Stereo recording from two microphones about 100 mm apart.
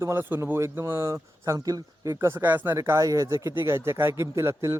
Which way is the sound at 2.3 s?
20° right (ahead or behind).